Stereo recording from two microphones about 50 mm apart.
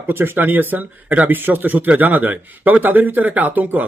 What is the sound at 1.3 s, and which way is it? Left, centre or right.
Speech, right.